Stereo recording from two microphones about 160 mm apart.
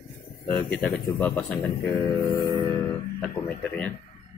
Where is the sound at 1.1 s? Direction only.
10° left (ahead or behind).